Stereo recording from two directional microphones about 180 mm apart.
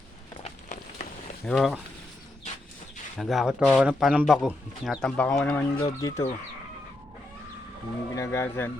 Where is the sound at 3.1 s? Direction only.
Centre (ahead or behind); by 6.2 s 15° left (ahead or behind).